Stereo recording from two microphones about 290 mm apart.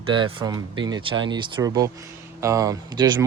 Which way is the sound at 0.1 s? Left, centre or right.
Centre.